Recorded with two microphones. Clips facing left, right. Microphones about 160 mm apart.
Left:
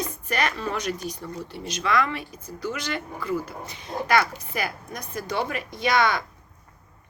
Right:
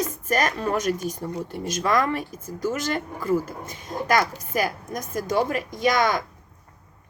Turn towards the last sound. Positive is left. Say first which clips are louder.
# right 1 dB
turn(degrees=-45)  # may be behind; listen again after turning